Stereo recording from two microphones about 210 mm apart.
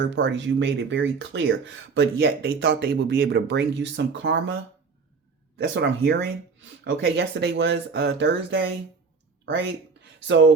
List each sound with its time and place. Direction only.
0.0 s speech: 55° right (ahead or behind)
5.5 s speech: 60° right (ahead or behind)
10.2 s speech: 60° right (ahead or behind)